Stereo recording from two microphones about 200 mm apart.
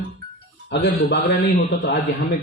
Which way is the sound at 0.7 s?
60° left (ahead or behind).